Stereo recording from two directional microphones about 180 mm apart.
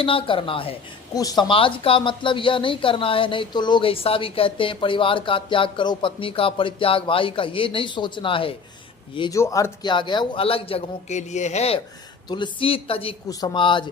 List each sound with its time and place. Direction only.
0.0 s a woman's voice: 30° left (ahead or behind)
9.4 s a man's voice: 15° left (ahead or behind)